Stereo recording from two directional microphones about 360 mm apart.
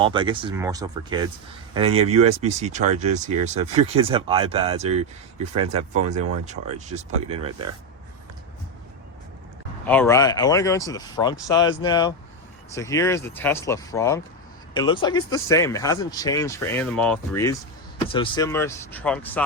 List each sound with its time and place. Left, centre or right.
0.0 s speech: centre
6.4 s speech: centre
9.8 s speech: centre